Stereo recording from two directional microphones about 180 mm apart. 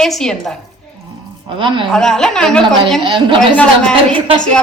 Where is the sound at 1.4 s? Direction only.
30° right (ahead or behind).